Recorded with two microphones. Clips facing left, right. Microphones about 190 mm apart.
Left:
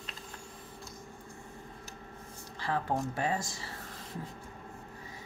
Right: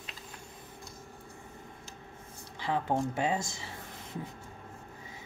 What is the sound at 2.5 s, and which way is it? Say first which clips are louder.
Speech: right 2 dB; 20° right (ahead or behind).